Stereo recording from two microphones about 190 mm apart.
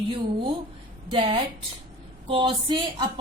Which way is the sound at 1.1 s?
25° right (ahead or behind).